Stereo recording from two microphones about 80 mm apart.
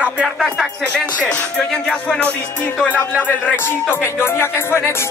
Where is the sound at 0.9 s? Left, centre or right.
Centre.